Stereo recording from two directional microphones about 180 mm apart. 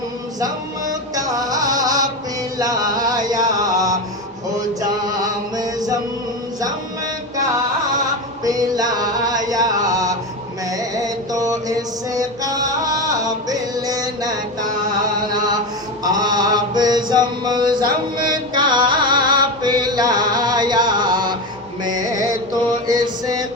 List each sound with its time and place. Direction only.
0.3 s music: 20° right (ahead or behind)
5.5 s music: 20° right (ahead or behind)
8.4 s music: 20° right (ahead or behind)
10.9 s mantra: 20° right (ahead or behind)
13.5 s music: 20° right (ahead or behind)
16.0 s mantra: 20° right (ahead or behind)
18.5 s music: 25° right (ahead or behind)
22.9 s mantra: 20° right (ahead or behind)